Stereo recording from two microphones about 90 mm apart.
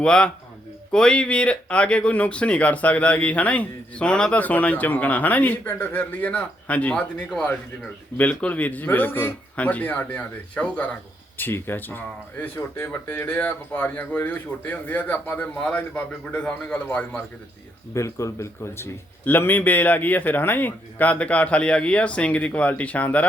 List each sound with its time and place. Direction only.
0.0 s speech: 10° left (ahead or behind)
8.2 s speech: 15° left (ahead or behind)
17.9 s speech: 35° left (ahead or behind); by 23.2 s 15° left (ahead or behind)